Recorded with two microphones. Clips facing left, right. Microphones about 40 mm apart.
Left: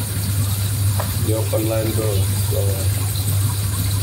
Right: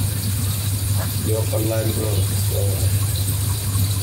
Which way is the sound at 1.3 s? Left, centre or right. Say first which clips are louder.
Left 2 dB; centre.